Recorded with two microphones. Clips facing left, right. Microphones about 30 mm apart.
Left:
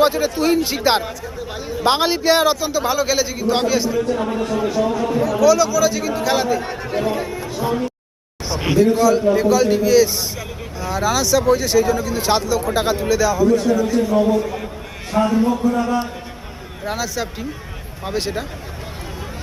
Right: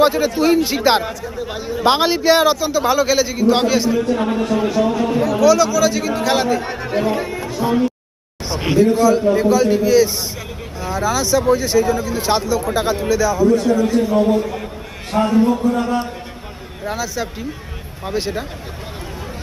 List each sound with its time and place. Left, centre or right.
0.0 s a man's voice: centre
1.8 s a man's voice: right
6.9 s a man's voice: centre
10.9 s a man's voice: centre
12.1 s speech: centre
12.4 s a man's voice: centre
12.7 s speech: centre
13.0 s a man's voice: centre
16.8 s speech: centre